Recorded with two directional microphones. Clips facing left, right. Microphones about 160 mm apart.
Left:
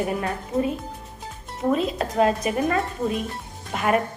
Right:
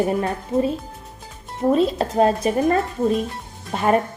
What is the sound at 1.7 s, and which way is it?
A woman's voice, 35° right (ahead or behind).